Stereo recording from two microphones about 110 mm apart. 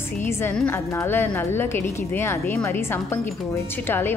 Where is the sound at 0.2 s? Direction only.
20° left (ahead or behind).